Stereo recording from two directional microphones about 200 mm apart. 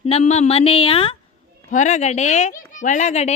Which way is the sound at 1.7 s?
40° left (ahead or behind).